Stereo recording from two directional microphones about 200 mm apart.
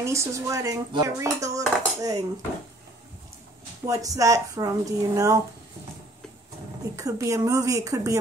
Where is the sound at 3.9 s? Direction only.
15° right (ahead or behind).